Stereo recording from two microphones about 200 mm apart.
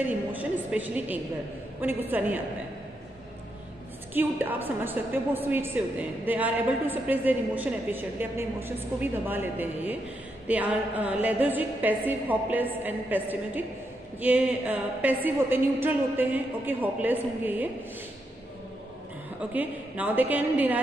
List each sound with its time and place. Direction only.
0.0 s a woman's voice: 10° right (ahead or behind)
4.1 s a woman's voice: 10° right (ahead or behind)
19.5 s a woman's voice: 10° right (ahead or behind)